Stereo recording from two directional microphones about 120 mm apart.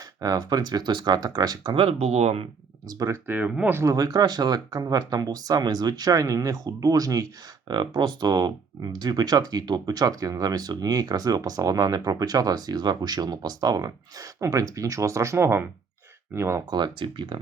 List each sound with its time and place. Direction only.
0.2 s speech: 35° right (ahead or behind)
1.7 s speech: 50° right (ahead or behind)
2.8 s speech: 30° right (ahead or behind)
3.2 s speech: 10° right (ahead or behind)
16.6 s speech: 35° right (ahead or behind)